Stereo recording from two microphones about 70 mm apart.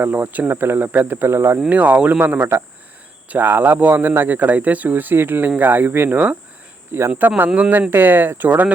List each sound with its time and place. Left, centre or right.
0.0 s speech: right
1.7 s speech: right
7.5 s speech: centre
7.8 s speech: right